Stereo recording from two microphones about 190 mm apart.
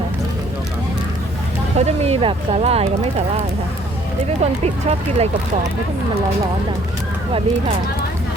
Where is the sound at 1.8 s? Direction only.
35° right (ahead or behind).